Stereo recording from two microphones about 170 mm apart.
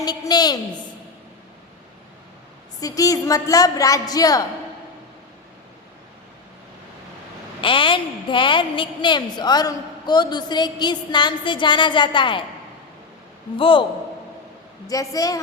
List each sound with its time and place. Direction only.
0.0 s a woman's voice: 25° left (ahead or behind)
2.8 s a woman's voice: 20° left (ahead or behind)
7.6 s a woman's voice: 30° left (ahead or behind)
13.6 s a woman's voice: 30° left (ahead or behind)
14.8 s a woman's voice: 20° left (ahead or behind)